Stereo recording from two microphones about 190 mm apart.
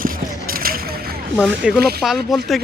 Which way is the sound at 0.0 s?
50° right (ahead or behind).